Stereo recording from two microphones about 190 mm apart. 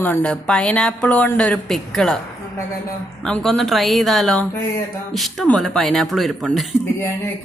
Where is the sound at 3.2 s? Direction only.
5° left (ahead or behind).